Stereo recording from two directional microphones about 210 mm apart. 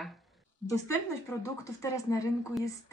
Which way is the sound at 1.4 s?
15° left (ahead or behind).